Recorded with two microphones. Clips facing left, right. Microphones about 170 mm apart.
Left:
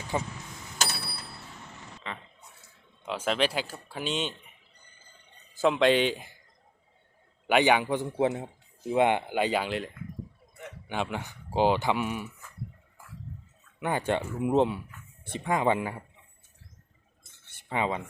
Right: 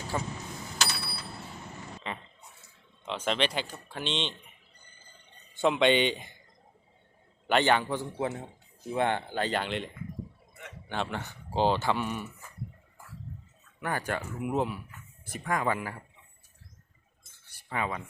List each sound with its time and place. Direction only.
0.1 s speech: 15° left (ahead or behind)
2.0 s speech: 20° right (ahead or behind)
3.1 s speech: 5° left (ahead or behind)
5.5 s speech: centre (ahead or behind)
7.4 s speech: 10° left (ahead or behind)
13.7 s speech: 20° left (ahead or behind)
17.4 s a sound: 25° left (ahead or behind)